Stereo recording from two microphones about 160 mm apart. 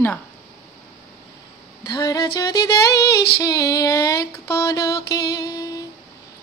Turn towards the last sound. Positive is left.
turn(degrees=20)  # may be behind; listen again after turning